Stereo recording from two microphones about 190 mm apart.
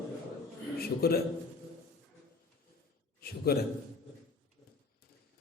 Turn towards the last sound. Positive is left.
turn(degrees=55)  # may be behind; listen again after turning